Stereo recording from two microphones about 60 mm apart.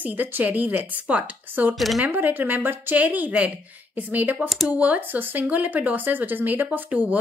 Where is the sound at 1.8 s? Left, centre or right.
Centre.